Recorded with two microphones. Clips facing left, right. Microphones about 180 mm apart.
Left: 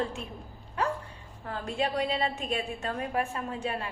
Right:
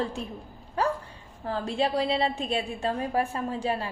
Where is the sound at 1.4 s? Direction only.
30° right (ahead or behind).